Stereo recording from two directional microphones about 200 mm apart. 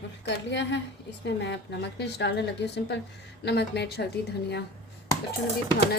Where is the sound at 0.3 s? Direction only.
60° left (ahead or behind).